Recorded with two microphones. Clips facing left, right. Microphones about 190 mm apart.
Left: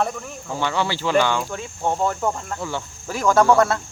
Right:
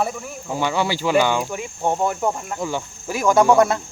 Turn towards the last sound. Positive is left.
turn(degrees=-15)  # may be behind; listen again after turning